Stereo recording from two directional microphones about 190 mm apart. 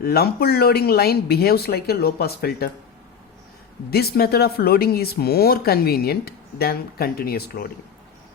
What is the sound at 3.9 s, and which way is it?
Speech, 55° left (ahead or behind).